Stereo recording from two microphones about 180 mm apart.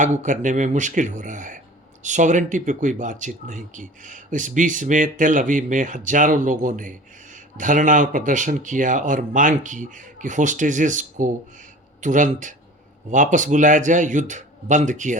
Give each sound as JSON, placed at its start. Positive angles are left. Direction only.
{"t": 0.0, "sound": "speech", "side_deg": -45}